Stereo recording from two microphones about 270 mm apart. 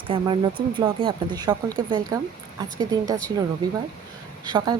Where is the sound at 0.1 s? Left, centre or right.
Centre.